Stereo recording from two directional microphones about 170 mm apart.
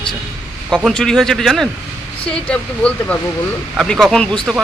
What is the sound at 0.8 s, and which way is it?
Speech, centre (ahead or behind).